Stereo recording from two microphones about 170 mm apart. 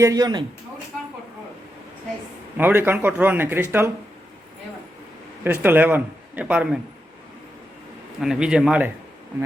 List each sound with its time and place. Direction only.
0.0 s a man's voice: 20° right (ahead or behind)
2.6 s speech: 10° right (ahead or behind)
5.4 s a man's voice: 10° right (ahead or behind)
8.2 s a man's voice: 5° right (ahead or behind)